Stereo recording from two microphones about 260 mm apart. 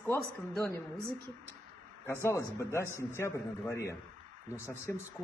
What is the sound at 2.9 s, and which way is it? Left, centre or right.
Speech, centre.